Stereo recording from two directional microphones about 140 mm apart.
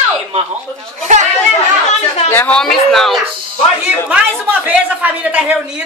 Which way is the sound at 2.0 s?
45° left (ahead or behind).